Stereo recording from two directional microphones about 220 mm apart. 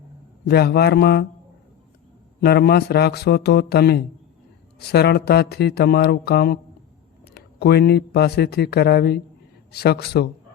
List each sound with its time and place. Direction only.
0.4 s speech: 45° left (ahead or behind)
2.4 s speech: 45° left (ahead or behind)